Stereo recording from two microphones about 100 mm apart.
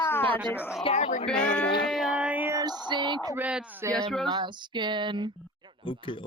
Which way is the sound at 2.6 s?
50° right (ahead or behind).